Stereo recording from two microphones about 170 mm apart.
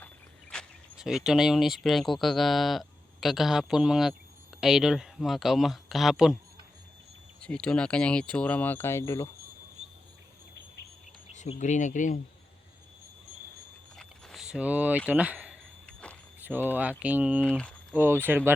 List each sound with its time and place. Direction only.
0.5 s speech: centre (ahead or behind)
7.4 s speech: 5° left (ahead or behind)
11.3 s speech: 45° left (ahead or behind)
13.9 s a sound: 5° left (ahead or behind)
15.9 s walk: 5° left (ahead or behind)
16.4 s speech: 10° right (ahead or behind)